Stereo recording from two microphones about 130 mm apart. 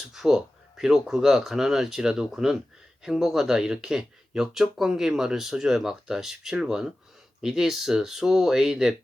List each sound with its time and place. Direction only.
0.1 s speech: 5° right (ahead or behind)